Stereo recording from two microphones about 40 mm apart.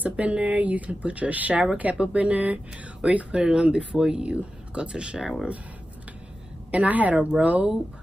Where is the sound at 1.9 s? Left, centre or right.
Right.